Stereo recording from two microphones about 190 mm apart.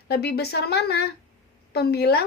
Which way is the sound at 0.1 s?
60° left (ahead or behind).